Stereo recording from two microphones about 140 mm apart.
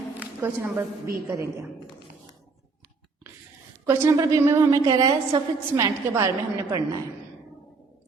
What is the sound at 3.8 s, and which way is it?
A woman's voice, 20° right (ahead or behind).